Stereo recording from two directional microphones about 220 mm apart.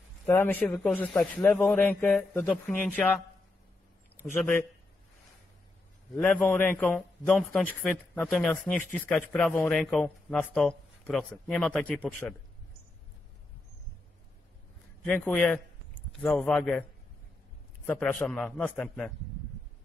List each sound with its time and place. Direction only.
0.3 s a man's voice: 10° left (ahead or behind)
4.2 s a man's voice: 10° left (ahead or behind)
6.1 s a man's voice: 5° left (ahead or behind)
15.0 s speech: 5° left (ahead or behind)
17.8 s a man's voice: 5° left (ahead or behind)